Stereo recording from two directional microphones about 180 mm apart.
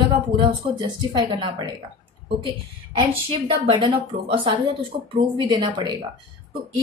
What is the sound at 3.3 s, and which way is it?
A woman's voice, 30° right (ahead or behind).